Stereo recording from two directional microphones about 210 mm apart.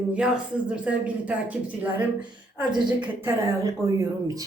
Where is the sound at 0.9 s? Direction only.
5° right (ahead or behind).